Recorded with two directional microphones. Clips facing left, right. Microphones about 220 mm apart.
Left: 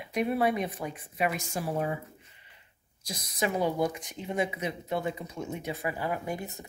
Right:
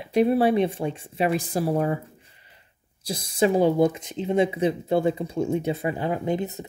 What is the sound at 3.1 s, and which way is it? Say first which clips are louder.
Speech: right 9 dB; 30° right (ahead or behind).